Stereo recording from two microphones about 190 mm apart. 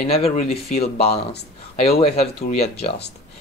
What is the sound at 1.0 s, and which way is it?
Speech, 60° left (ahead or behind).